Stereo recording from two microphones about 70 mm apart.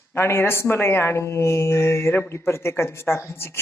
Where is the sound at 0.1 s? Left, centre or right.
Left.